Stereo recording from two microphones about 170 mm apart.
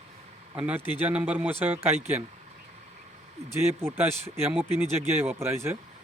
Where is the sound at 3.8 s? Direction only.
15° right (ahead or behind).